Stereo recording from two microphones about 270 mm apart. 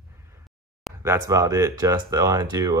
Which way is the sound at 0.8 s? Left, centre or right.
Centre.